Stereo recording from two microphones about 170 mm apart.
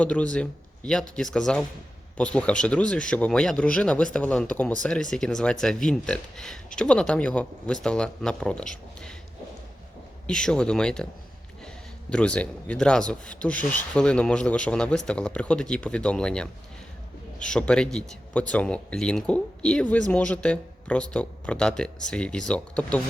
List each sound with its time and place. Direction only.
0.0 s speech: 5° left (ahead or behind)
10.2 s speech: 5° left (ahead or behind)
12.1 s speech: 5° left (ahead or behind)